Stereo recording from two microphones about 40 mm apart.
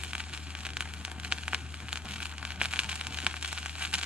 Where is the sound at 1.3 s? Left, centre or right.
Right.